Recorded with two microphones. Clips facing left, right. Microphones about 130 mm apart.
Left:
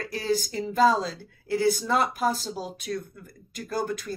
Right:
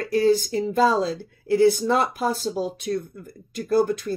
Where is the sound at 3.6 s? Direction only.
30° right (ahead or behind).